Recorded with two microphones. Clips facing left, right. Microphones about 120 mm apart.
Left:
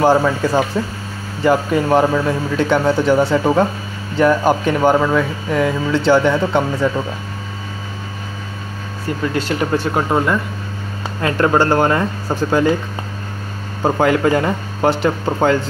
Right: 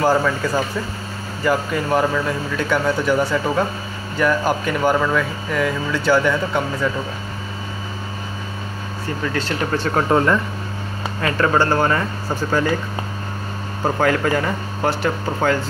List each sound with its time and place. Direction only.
0.0 s speech: 25° left (ahead or behind)
9.3 s speech: 15° left (ahead or behind)
11.2 s speech: 25° left (ahead or behind)
13.8 s speech: 20° left (ahead or behind)